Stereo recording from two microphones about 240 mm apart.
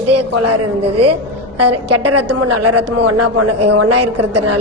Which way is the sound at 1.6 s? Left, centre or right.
Right.